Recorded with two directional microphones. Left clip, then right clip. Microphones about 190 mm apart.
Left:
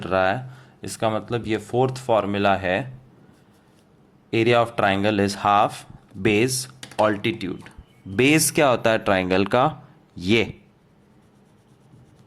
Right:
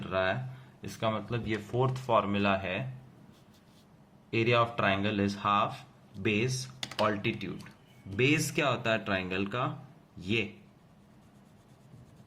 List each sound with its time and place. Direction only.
0.0 s speech: 50° left (ahead or behind)
4.3 s speech: 45° left (ahead or behind)